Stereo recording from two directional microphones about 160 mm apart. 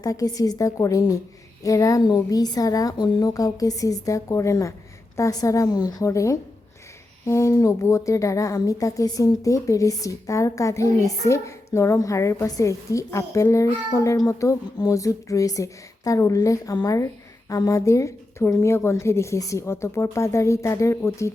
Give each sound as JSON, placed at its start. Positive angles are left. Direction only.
{"t": 0.0, "sound": "a woman's voice", "side_deg": 20}